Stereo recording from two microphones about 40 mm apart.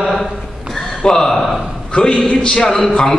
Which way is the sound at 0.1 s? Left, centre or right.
Centre.